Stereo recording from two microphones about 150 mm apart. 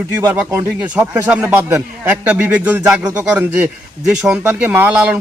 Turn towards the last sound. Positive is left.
turn(degrees=-10)  # may be behind; listen again after turning